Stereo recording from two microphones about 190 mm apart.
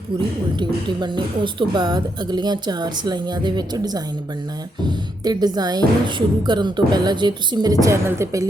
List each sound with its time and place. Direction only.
0.6 s a woman's voice: 25° right (ahead or behind)